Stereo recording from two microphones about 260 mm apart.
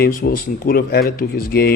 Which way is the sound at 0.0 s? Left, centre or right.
Left.